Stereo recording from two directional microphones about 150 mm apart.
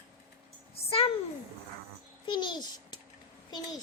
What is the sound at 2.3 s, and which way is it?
A child's voice, 30° left (ahead or behind).